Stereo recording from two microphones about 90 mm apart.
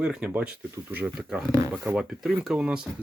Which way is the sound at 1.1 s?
5° right (ahead or behind).